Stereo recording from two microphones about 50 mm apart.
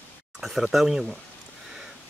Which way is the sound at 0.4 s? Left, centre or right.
Centre.